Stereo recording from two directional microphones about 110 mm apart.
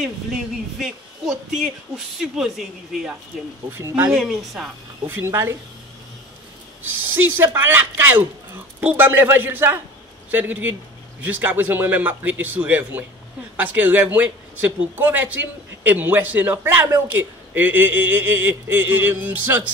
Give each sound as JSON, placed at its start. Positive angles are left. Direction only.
{"t": 0.7, "sound": "speech", "side_deg": -5}
{"t": 3.7, "sound": "speech", "side_deg": -20}
{"t": 4.1, "sound": "speech", "side_deg": -5}
{"t": 5.0, "sound": "speech", "side_deg": -20}
{"t": 6.8, "sound": "a man's voice", "side_deg": -20}